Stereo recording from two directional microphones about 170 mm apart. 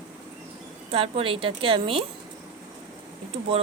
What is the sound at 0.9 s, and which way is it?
A woman's voice, 35° right (ahead or behind).